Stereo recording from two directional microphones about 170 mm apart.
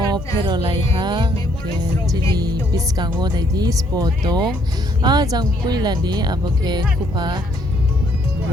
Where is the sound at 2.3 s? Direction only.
20° right (ahead or behind).